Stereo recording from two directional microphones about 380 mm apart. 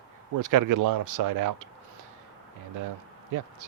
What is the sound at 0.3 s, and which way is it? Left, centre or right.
Speech, right.